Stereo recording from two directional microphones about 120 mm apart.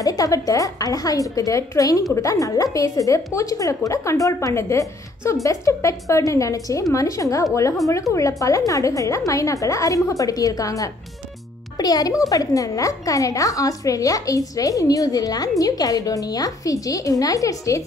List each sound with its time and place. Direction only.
0.0 s a woman's voice: 30° left (ahead or behind)